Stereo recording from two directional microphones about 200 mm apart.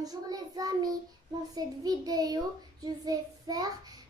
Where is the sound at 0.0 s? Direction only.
20° right (ahead or behind).